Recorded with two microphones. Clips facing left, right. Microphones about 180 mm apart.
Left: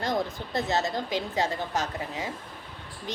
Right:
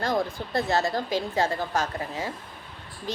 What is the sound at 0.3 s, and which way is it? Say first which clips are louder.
A woman's voice: right 2 dB; 20° left (ahead or behind).